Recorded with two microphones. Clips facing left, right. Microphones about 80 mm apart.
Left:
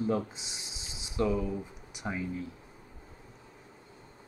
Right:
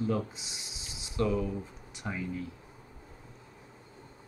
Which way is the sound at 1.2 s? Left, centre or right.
Centre.